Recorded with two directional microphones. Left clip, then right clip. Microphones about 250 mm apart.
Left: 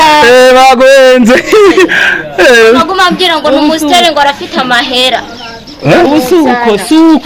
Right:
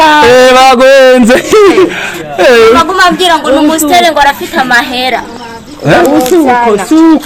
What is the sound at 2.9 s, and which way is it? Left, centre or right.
A man's voice, centre.